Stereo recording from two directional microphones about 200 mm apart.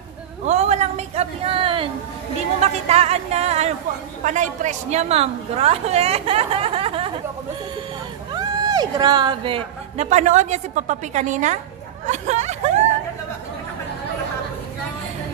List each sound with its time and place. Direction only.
0.5 s a sound: 35° right (ahead or behind)
2.6 s a woman's voice: 30° right (ahead or behind)
8.3 s speech: 20° right (ahead or behind)
10.0 s a woman's voice: 35° right (ahead or behind)
12.1 s hubbub: 35° right (ahead or behind)